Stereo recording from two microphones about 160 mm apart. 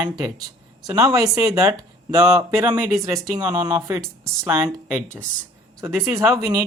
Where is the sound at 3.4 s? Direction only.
25° right (ahead or behind).